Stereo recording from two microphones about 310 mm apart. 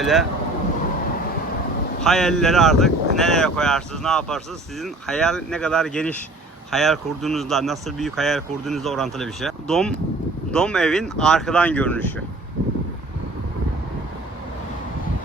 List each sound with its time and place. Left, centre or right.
0.0 s speech: centre
2.0 s speech: centre